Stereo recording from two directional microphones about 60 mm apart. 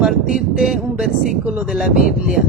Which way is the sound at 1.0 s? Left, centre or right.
Centre.